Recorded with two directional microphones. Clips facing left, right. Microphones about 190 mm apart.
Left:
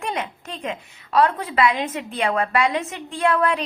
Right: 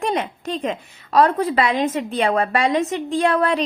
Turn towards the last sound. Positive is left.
turn(degrees=-35)  # may be behind; listen again after turning